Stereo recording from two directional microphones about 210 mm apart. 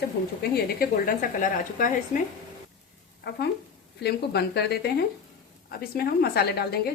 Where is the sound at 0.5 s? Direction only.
45° left (ahead or behind).